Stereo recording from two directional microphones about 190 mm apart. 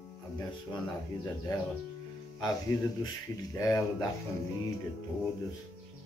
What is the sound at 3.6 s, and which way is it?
Speech, 15° left (ahead or behind).